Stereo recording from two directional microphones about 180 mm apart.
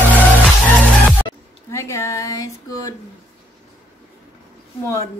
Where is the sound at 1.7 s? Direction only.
15° left (ahead or behind).